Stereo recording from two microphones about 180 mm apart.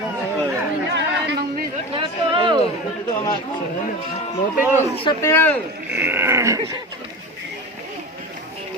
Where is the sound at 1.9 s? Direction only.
25° right (ahead or behind).